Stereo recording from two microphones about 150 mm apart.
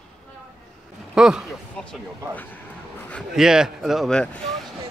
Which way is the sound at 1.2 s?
5° right (ahead or behind).